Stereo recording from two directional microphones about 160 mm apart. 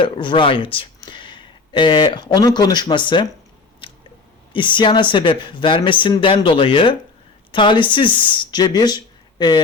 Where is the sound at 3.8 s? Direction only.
35° left (ahead or behind).